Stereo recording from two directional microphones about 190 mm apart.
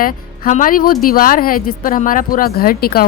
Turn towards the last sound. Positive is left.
turn(degrees=50)  # may be behind; listen again after turning